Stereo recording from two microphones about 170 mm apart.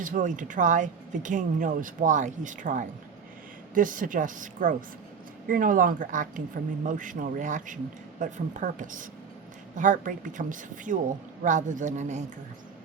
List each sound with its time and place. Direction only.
0.0 s speech: 50° right (ahead or behind)